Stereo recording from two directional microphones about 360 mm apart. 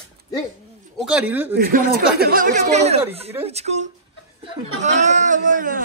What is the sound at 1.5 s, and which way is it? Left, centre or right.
Speech, right.